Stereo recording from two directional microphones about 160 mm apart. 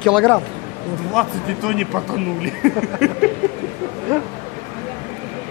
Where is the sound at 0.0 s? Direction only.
5° left (ahead or behind).